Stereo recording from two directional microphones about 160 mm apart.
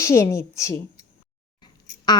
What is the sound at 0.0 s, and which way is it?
A woman's voice, 15° left (ahead or behind).